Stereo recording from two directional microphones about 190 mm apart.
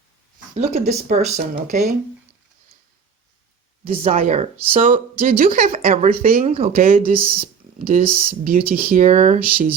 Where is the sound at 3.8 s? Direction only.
30° right (ahead or behind); by 5.8 s 45° right (ahead or behind).